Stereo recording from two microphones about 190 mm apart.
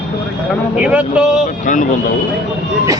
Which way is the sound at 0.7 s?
5° right (ahead or behind).